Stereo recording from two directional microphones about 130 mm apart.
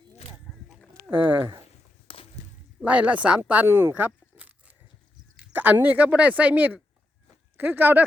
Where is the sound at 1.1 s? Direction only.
15° right (ahead or behind).